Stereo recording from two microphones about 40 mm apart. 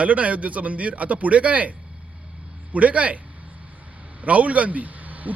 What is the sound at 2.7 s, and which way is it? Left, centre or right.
A man's voice, right.